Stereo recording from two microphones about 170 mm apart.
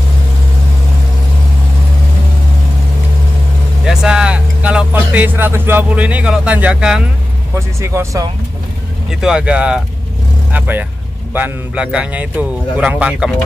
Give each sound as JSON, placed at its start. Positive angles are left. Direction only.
{"t": 3.8, "sound": "speech", "side_deg": -5}
{"t": 9.2, "sound": "speech", "side_deg": -5}